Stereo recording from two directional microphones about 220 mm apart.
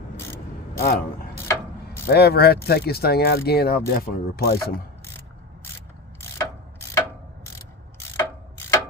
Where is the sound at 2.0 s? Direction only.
45° left (ahead or behind).